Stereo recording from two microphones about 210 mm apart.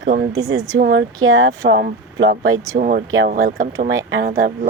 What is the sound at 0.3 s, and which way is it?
Speech, 15° right (ahead or behind).